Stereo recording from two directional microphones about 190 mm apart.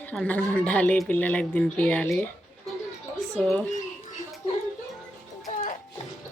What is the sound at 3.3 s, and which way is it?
Speech, centre (ahead or behind).